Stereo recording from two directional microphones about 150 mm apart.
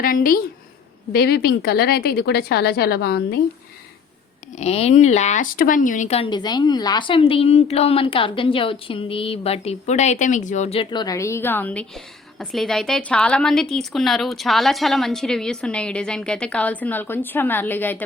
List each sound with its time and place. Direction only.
0.0 s a woman's voice: 70° left (ahead or behind)
1.1 s a woman's voice: 90° left
4.5 s speech: 45° left (ahead or behind)
10.8 s a woman's voice: 30° left (ahead or behind); by 18.0 s 10° left (ahead or behind)